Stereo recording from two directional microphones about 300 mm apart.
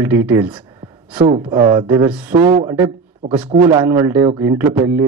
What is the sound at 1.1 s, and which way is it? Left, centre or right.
A man's voice, right.